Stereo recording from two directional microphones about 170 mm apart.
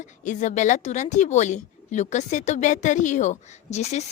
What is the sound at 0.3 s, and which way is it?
A woman's voice, 45° left (ahead or behind).